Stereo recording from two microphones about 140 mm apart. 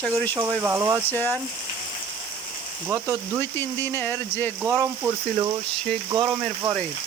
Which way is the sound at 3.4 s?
15° left (ahead or behind).